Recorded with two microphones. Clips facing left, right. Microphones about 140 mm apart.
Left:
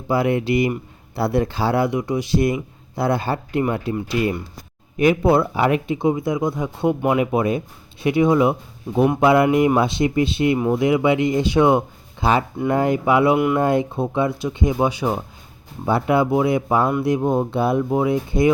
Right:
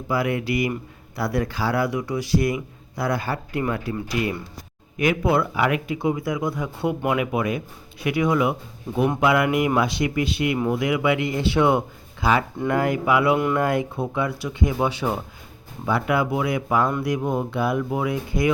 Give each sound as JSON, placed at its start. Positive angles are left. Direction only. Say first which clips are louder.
{"t": 0.1, "sound": "speech", "louder": "left 5 dB", "side_deg": 25}
{"t": 15.9, "sound": "speech", "louder": "left 4 dB", "side_deg": 30}